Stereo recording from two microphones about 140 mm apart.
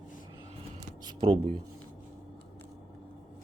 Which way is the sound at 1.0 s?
40° right (ahead or behind).